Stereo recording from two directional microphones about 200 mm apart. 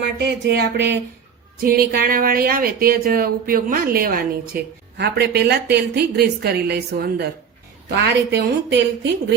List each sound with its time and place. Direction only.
0.0 s speech: 60° right (ahead or behind)
1.6 s speech: 45° right (ahead or behind)